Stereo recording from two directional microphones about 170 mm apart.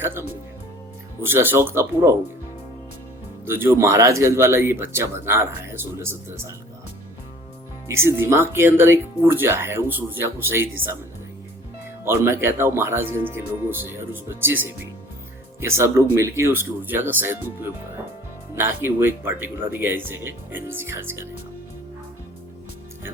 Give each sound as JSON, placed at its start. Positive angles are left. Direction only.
{"t": 0.0, "sound": "music", "side_deg": -15}
{"t": 1.2, "sound": "speech", "side_deg": -15}
{"t": 3.4, "sound": "speech", "side_deg": -15}
{"t": 7.9, "sound": "speech", "side_deg": -15}
{"t": 12.2, "sound": "speech", "side_deg": -15}